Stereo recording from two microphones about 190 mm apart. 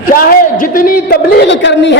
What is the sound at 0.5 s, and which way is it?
A woman's voice, 45° left (ahead or behind).